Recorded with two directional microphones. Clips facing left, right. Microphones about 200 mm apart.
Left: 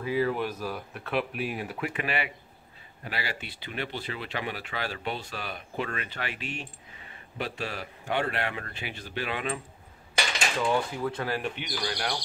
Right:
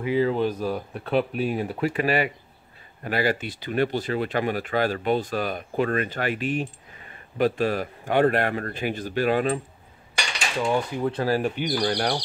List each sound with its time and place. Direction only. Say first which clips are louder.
0.0 s speech: right 5 dB; 25° right (ahead or behind); by 9.6 s 40° right (ahead or behind)
10.6 s speech: right 4 dB; 25° right (ahead or behind); by 12.2 s 50° right (ahead or behind)